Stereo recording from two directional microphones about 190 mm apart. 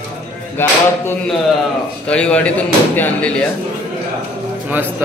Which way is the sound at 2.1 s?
5° left (ahead or behind).